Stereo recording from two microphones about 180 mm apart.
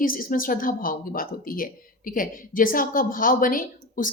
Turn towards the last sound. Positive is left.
turn(degrees=50)  # may be behind; listen again after turning